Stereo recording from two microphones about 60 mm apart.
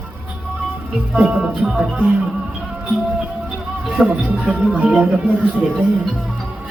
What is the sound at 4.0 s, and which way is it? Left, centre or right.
Speech, centre.